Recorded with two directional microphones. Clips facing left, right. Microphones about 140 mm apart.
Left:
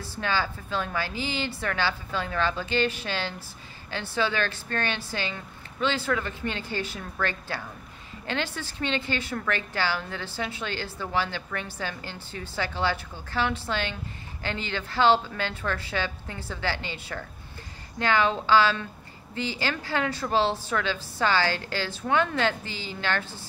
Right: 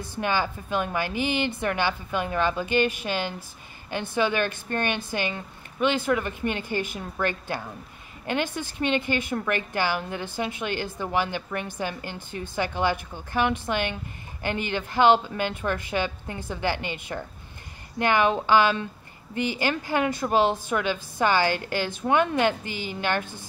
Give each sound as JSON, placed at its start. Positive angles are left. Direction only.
{"t": 0.0, "sound": "a woman's voice", "side_deg": -15}